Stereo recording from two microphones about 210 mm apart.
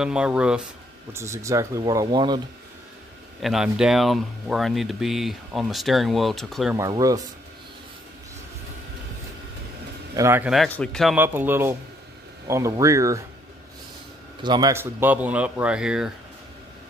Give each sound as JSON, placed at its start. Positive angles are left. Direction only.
{"t": 0.0, "sound": "speech", "side_deg": -5}
{"t": 3.4, "sound": "speech", "side_deg": 0}
{"t": 6.8, "sound": "speech", "side_deg": -15}
{"t": 10.1, "sound": "speech", "side_deg": -10}
{"t": 10.5, "sound": "speech", "side_deg": 0}
{"t": 11.1, "sound": "speech", "side_deg": -10}
{"t": 14.4, "sound": "speech", "side_deg": -20}